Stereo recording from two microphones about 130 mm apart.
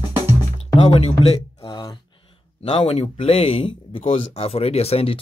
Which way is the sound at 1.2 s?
50° left (ahead or behind).